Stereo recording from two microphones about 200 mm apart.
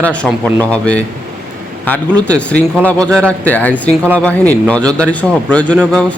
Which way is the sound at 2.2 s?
5° left (ahead or behind).